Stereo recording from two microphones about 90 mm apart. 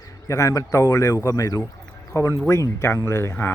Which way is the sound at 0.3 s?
35° left (ahead or behind).